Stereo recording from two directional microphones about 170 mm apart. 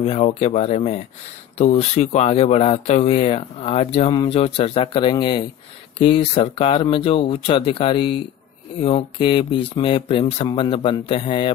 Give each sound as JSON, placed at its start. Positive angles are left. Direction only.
{"t": 0.0, "sound": "speech", "side_deg": 35}